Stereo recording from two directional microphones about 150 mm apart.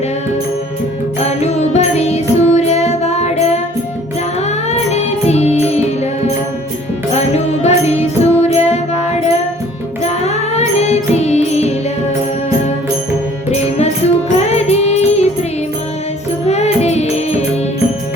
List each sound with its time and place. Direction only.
1.2 s music: 45° left (ahead or behind)
4.7 s music: 45° left (ahead or behind)
7.1 s music: 45° left (ahead or behind)
10.0 s music: 45° left (ahead or behind)
13.5 s music: 45° left (ahead or behind)
16.5 s music: 45° left (ahead or behind)